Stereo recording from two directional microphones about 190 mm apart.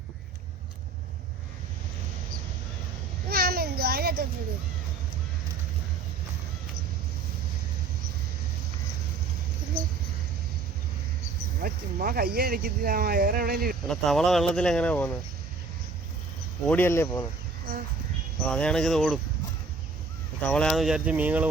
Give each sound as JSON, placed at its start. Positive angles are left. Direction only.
{"t": 3.2, "sound": "a sound", "side_deg": -55}
{"t": 11.6, "sound": "speech", "side_deg": -50}
{"t": 13.8, "sound": "speech", "side_deg": 0}
{"t": 16.6, "sound": "speech", "side_deg": 10}
{"t": 18.4, "sound": "speech", "side_deg": 5}
{"t": 20.4, "sound": "speech", "side_deg": 5}